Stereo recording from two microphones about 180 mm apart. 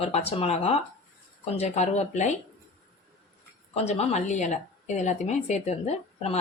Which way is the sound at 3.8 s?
35° left (ahead or behind).